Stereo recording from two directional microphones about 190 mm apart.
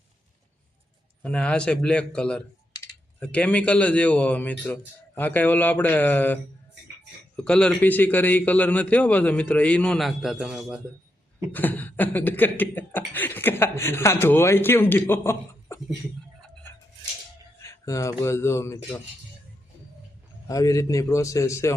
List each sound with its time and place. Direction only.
1.2 s speech: 5° left (ahead or behind)
3.2 s chuckle: 5° left (ahead or behind)
11.5 s chuckle: 10° left (ahead or behind)
17.6 s a man's voice: 15° left (ahead or behind)
20.5 s chuckle: 15° left (ahead or behind)